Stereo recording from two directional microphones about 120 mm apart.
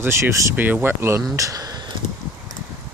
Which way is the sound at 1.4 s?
30° right (ahead or behind).